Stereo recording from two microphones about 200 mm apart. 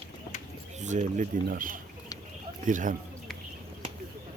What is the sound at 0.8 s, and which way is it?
Speech, 35° right (ahead or behind).